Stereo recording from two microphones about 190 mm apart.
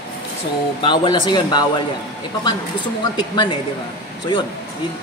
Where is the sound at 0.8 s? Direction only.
25° left (ahead or behind).